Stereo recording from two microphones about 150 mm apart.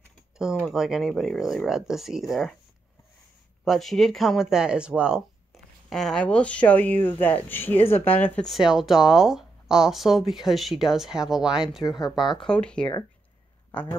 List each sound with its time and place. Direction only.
0.4 s speech: 5° right (ahead or behind)
3.6 s speech: centre (ahead or behind)
8.5 s speech: 5° right (ahead or behind)
12.0 s speech: 30° left (ahead or behind)
12.4 s speech: 5° left (ahead or behind)